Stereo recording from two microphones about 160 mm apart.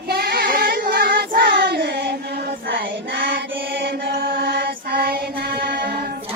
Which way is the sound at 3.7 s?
80° right.